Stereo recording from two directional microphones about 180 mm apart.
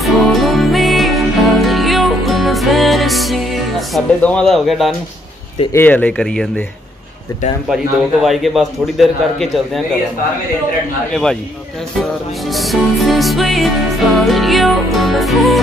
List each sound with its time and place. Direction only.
0.0 s music: centre (ahead or behind)
5.7 s speech: 10° left (ahead or behind)
7.7 s a man's voice: centre (ahead or behind)
12.0 s a man's voice: centre (ahead or behind)